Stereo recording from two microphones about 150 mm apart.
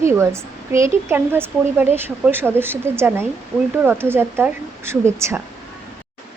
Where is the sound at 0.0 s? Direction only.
20° right (ahead or behind).